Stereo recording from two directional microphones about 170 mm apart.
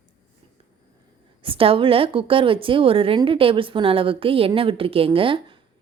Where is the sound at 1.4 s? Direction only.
35° right (ahead or behind).